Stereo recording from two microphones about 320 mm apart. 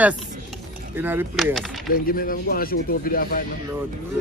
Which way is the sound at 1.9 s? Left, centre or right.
Left.